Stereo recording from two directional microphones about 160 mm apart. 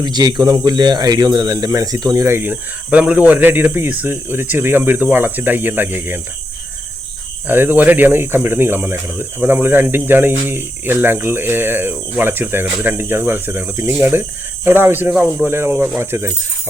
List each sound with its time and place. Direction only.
0.0 s speech: 25° right (ahead or behind)
7.4 s speech: 10° right (ahead or behind)